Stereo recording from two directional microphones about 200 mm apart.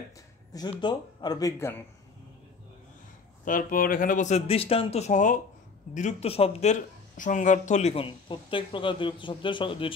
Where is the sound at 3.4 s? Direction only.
45° left (ahead or behind).